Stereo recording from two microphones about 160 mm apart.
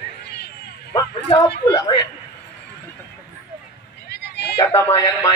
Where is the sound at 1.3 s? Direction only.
20° left (ahead or behind).